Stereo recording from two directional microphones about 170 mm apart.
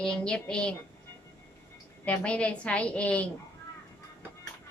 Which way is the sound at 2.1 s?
5° left (ahead or behind).